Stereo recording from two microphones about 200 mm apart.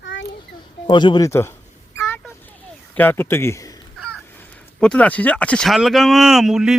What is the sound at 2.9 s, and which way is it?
A man's voice, 10° left (ahead or behind).